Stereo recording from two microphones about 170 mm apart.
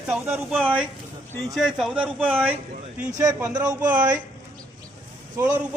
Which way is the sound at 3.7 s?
10° right (ahead or behind).